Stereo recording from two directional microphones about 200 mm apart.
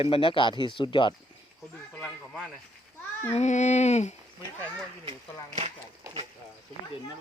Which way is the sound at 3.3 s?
35° left (ahead or behind).